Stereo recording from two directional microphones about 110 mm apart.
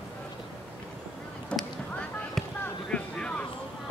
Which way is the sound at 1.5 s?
5° left (ahead or behind).